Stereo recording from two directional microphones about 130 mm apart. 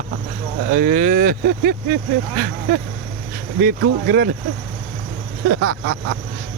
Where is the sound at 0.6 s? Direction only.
90° right.